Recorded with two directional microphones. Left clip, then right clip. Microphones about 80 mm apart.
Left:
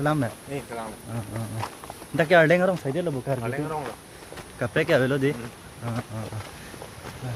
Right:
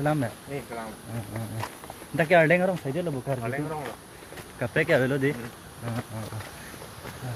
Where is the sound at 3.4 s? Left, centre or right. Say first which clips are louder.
Left 2 dB; left.